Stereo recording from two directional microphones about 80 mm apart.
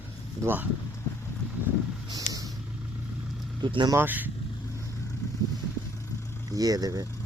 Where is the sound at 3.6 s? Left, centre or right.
Right.